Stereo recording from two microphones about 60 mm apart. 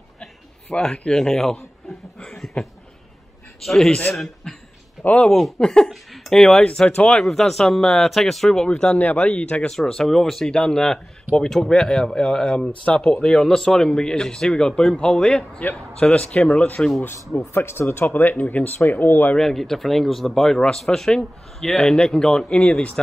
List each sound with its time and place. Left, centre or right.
0.7 s speech: centre
2.2 s a sound: centre
3.6 s a man's voice: centre; by 9.7 s left
9.7 s speech: centre; by 16.8 s left
17.4 s speech: left
19.3 s speech: centre